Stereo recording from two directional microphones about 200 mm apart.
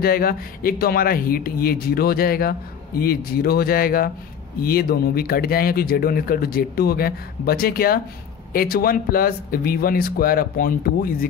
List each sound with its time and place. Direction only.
0.0 s speech: 50° left (ahead or behind)